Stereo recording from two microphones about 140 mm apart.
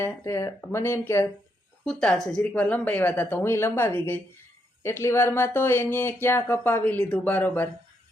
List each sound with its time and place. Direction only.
0.0 s speech: 20° left (ahead or behind)
1.8 s speech: 5° left (ahead or behind)